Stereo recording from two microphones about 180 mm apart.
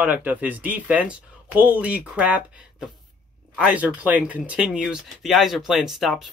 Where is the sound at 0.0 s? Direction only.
10° right (ahead or behind).